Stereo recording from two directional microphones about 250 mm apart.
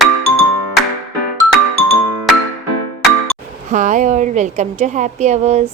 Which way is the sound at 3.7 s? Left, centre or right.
Right.